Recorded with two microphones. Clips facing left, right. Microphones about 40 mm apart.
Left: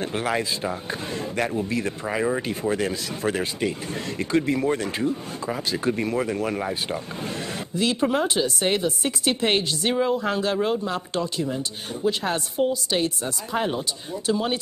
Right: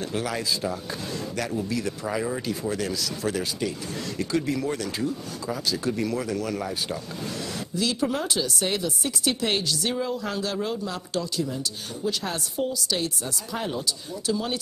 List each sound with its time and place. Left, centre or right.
0.0 s speech: left